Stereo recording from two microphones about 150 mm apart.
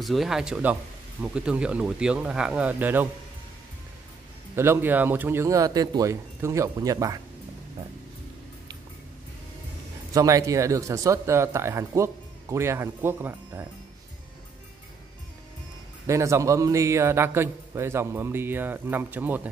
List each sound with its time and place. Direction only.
0.0 s a man's voice: centre (ahead or behind)
4.6 s speech: 15° right (ahead or behind)
10.1 s speech: 20° right (ahead or behind)
16.1 s a man's voice: 20° right (ahead or behind)